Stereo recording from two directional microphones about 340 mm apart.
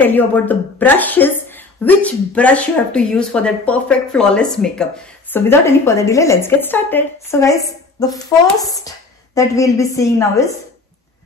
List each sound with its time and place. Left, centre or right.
0.0 s speech: centre